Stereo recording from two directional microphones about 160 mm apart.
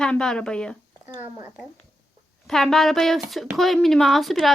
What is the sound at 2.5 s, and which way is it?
Speech, centre (ahead or behind).